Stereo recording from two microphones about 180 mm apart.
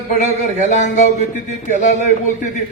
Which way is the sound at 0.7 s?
40° left (ahead or behind).